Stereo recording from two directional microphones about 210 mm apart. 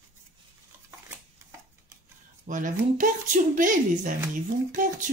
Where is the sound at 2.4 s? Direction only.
40° right (ahead or behind).